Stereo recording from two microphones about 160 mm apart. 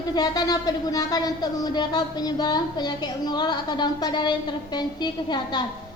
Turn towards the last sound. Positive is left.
turn(degrees=25)  # may be behind; listen again after turning